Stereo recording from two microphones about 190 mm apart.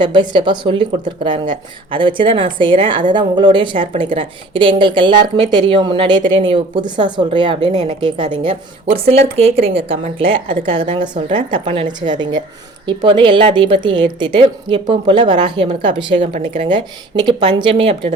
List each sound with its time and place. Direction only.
0.0 s speech: 25° right (ahead or behind)